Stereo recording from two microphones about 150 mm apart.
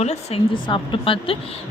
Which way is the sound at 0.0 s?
45° left (ahead or behind).